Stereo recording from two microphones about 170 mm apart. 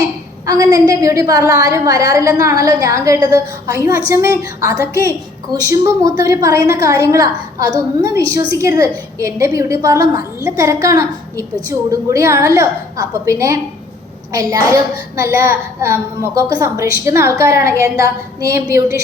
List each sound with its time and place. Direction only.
0.4 s a woman's voice: 20° right (ahead or behind)
15.1 s a woman's voice: 15° right (ahead or behind)